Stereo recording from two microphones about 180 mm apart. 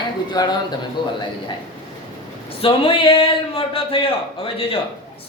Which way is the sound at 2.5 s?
30° left (ahead or behind).